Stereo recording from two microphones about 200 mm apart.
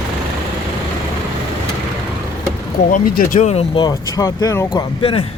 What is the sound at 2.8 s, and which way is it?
Speech, 45° left (ahead or behind).